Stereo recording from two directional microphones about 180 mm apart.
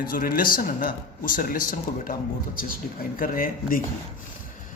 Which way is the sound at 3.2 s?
50° left (ahead or behind).